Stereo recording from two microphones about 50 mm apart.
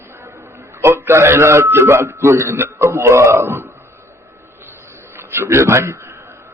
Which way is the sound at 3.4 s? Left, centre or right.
Right.